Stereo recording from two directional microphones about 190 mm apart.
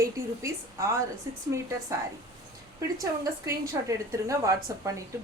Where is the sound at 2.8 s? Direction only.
15° right (ahead or behind).